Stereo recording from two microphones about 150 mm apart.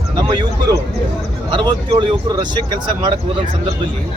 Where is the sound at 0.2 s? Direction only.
30° right (ahead or behind).